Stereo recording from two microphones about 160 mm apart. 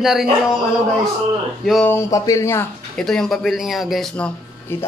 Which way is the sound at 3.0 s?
5° left (ahead or behind).